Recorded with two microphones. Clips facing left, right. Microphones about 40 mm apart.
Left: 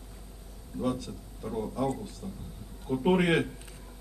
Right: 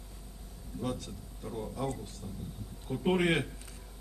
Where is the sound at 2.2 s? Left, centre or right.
Centre.